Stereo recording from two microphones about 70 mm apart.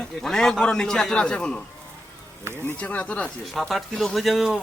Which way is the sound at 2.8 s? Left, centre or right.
Centre.